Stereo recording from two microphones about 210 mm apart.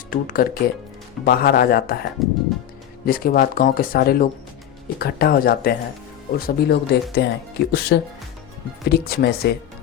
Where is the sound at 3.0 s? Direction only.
45° left (ahead or behind).